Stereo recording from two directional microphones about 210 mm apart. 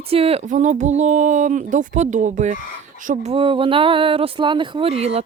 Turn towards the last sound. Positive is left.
turn(degrees=-30)  # may be behind; listen again after turning